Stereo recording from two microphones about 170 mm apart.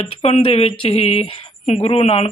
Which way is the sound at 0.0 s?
35° left (ahead or behind).